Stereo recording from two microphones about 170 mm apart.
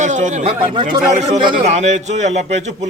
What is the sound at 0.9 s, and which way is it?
A man's voice, 45° right (ahead or behind).